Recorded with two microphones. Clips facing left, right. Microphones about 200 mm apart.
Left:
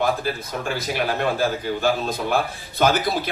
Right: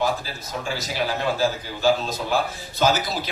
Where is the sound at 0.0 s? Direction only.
55° left (ahead or behind).